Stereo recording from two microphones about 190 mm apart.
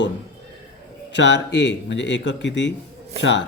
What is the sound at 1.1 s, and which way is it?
Speech, 65° left (ahead or behind).